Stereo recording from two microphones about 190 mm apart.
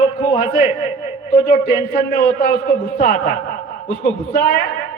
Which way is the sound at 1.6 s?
55° left (ahead or behind).